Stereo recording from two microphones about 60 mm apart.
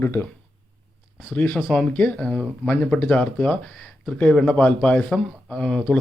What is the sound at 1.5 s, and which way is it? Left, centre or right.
Speech, centre.